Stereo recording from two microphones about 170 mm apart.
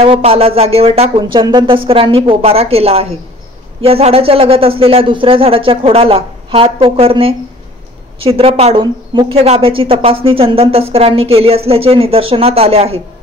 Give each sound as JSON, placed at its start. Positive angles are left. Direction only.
{"t": 0.0, "sound": "speech", "side_deg": -35}